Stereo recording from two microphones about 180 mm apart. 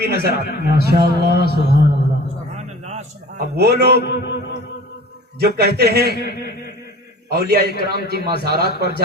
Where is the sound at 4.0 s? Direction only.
70° left (ahead or behind).